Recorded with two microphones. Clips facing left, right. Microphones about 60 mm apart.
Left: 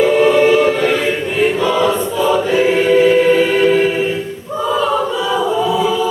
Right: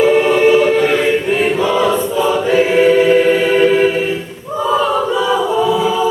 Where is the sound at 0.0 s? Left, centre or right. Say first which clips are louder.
Even; centre.